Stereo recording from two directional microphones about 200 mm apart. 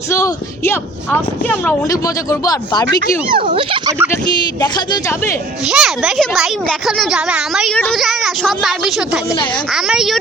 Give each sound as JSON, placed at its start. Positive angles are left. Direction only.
{"t": 0.1, "sound": "speech", "side_deg": 15}
{"t": 3.5, "sound": "speech", "side_deg": -25}
{"t": 4.9, "sound": "speech", "side_deg": 15}
{"t": 5.6, "sound": "speech", "side_deg": 0}